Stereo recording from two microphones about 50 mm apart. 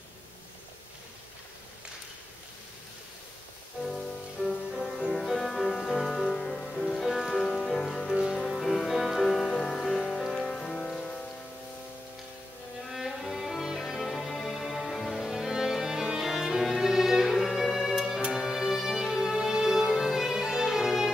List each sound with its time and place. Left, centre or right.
3.8 s music: centre
6.9 s music: centre
12.9 s music: centre
16.3 s violin: centre
17.3 s music: centre